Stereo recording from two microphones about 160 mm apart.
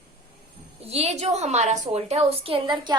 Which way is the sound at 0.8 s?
40° right (ahead or behind).